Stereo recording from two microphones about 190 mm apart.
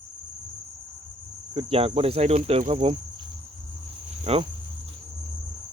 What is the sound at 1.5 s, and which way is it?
Cricket, 30° right (ahead or behind).